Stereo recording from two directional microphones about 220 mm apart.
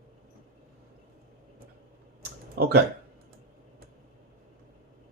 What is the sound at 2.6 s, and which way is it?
Speech, 45° right (ahead or behind).